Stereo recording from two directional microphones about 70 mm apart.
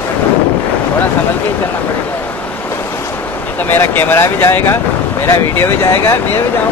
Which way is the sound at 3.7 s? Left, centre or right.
Left.